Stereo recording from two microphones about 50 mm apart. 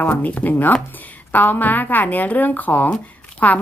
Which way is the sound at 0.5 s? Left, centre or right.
Left.